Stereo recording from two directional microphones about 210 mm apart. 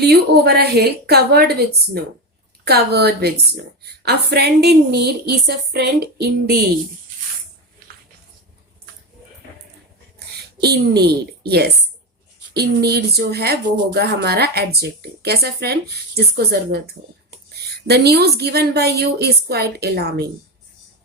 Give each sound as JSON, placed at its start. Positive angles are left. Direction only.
{"t": 0.0, "sound": "speech", "side_deg": -50}
{"t": 10.2, "sound": "a woman's voice", "side_deg": -50}